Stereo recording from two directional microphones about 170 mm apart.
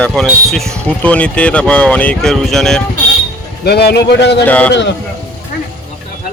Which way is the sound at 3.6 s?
75° left (ahead or behind).